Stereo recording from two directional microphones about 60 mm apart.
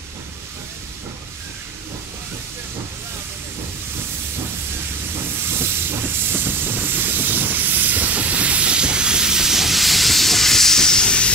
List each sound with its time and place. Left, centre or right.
5.5 s hiss: right; by 11.3 s centre